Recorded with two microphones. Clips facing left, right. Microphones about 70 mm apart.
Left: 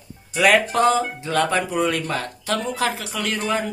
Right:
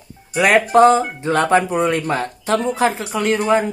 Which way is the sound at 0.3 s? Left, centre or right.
Right.